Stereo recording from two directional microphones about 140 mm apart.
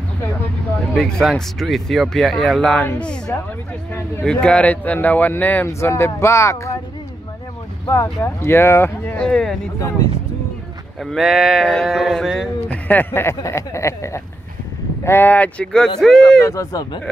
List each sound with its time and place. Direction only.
0.9 s speech: 5° left (ahead or behind); by 6.8 s 20° left (ahead or behind)
7.8 s speech: 20° left (ahead or behind)
11.0 s speech: centre (ahead or behind)
12.6 s speech: 10° left (ahead or behind)
16.4 s speech: 25° left (ahead or behind)